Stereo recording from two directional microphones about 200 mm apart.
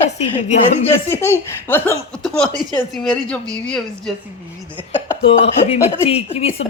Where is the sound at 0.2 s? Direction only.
35° left (ahead or behind).